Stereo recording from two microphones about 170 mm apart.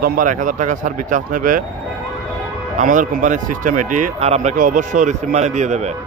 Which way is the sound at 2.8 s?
50° right (ahead or behind).